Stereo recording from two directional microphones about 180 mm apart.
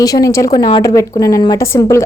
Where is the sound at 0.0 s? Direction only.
20° left (ahead or behind).